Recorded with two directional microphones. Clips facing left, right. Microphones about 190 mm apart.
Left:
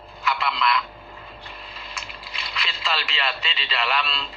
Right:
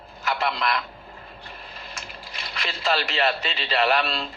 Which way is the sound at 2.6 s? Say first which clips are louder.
Right 6 dB; 45° right (ahead or behind).